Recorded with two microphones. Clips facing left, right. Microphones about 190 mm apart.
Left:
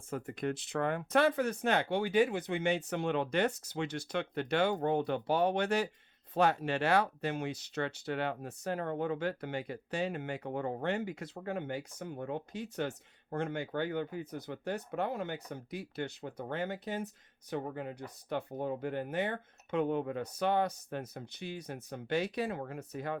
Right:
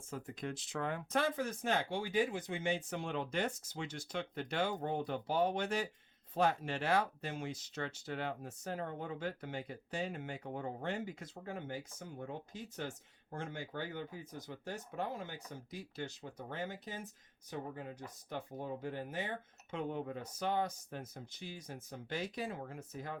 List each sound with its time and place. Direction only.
0.1 s speech: 65° left (ahead or behind)